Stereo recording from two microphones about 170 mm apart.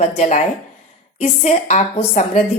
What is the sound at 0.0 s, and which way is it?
Speech, 40° left (ahead or behind).